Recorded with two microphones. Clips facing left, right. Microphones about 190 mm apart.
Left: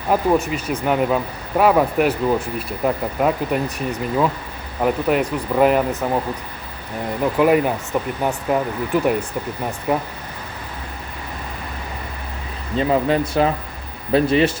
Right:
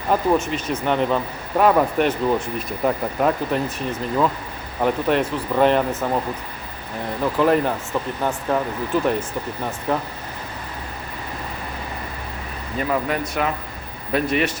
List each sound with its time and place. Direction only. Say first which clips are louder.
0.1 s speech: left 1 dB; 10° left (ahead or behind)
7.2 s speech: left 2 dB; 10° left (ahead or behind)
12.7 s speech: left 5 dB; 25° left (ahead or behind)